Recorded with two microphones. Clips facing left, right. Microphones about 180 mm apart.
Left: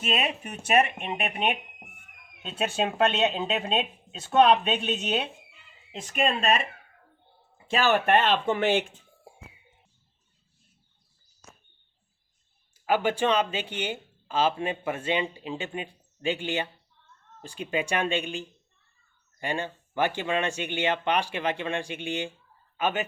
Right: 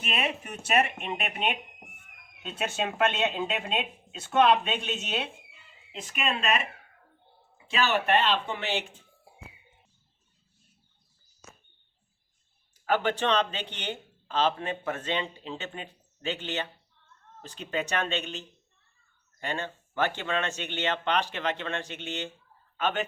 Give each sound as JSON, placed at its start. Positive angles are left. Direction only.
{"t": 0.0, "sound": "speech", "side_deg": 25}
{"t": 2.4, "sound": "speech", "side_deg": 30}
{"t": 5.9, "sound": "speech", "side_deg": 40}
{"t": 7.7, "sound": "speech", "side_deg": 50}
{"t": 9.3, "sound": "a sound", "side_deg": 45}
{"t": 12.8, "sound": "speech", "side_deg": 10}